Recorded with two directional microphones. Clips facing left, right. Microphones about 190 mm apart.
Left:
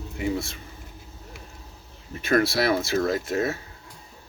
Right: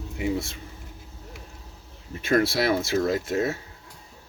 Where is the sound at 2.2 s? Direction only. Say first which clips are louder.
Even; 20° right (ahead or behind).